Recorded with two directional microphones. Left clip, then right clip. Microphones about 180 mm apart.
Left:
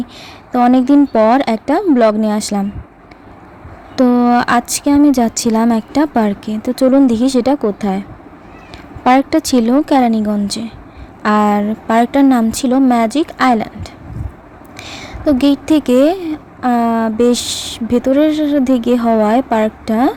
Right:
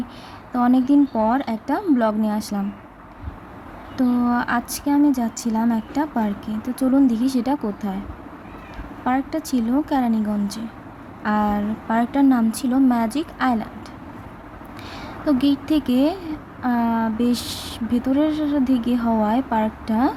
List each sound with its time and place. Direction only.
0.5 s speech: 35° left (ahead or behind)
3.9 s speech: 40° left (ahead or behind)
9.0 s speech: 45° left (ahead or behind)
14.8 s speech: 40° left (ahead or behind)